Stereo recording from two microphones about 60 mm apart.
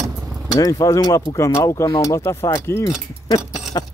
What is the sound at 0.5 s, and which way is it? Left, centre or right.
Speech, left.